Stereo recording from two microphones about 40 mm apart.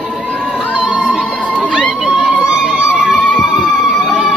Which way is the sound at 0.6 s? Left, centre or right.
Left.